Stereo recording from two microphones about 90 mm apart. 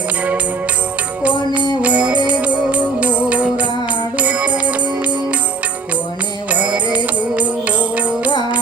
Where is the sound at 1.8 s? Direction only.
15° right (ahead or behind).